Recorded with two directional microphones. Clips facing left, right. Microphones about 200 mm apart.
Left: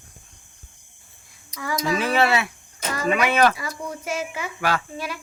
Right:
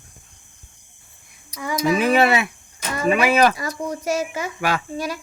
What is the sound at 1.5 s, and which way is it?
Speech, 15° right (ahead or behind).